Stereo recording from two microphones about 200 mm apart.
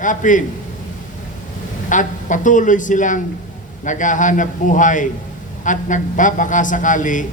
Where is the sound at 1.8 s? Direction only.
40° left (ahead or behind).